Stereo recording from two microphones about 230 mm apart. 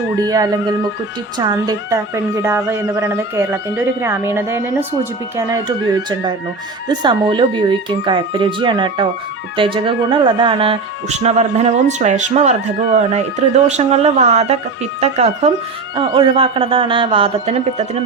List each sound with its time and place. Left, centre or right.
0.2 s a woman's voice: centre